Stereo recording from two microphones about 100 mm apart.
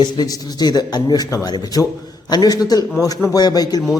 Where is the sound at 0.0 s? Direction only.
45° left (ahead or behind).